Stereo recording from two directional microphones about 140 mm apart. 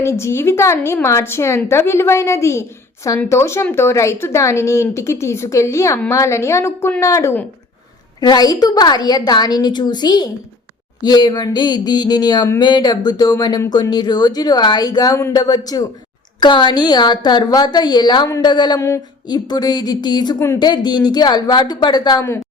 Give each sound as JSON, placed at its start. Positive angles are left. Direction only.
{"t": 0.0, "sound": "a woman's voice", "side_deg": 20}